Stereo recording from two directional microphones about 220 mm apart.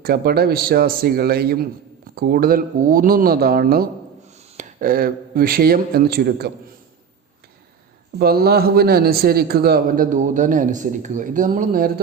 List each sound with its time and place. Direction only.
0.0 s a man's voice: 45° right (ahead or behind)
8.2 s a man's voice: 45° right (ahead or behind)